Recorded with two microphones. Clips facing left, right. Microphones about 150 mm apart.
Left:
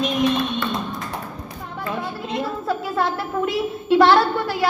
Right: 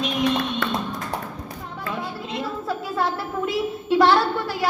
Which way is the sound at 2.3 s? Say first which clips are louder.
Left 4 dB; 55° left (ahead or behind).